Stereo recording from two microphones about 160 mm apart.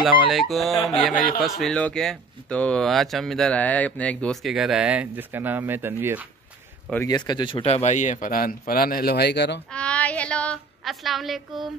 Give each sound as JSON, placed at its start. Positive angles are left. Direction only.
{"t": 0.0, "sound": "speech", "side_deg": 0}
{"t": 7.1, "sound": "a man's voice", "side_deg": 25}
{"t": 9.7, "sound": "a woman's voice", "side_deg": 5}